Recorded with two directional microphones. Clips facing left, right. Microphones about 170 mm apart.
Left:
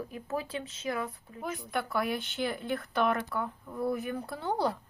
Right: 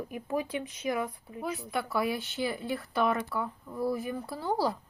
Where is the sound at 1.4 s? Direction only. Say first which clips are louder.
Right 1 dB; 5° right (ahead or behind).